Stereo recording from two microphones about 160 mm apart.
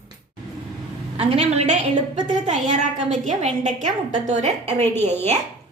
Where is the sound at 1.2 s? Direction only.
40° right (ahead or behind).